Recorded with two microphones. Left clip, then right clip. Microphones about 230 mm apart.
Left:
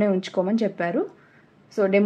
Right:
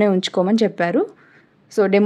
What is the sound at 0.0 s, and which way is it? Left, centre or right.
A woman's voice, right.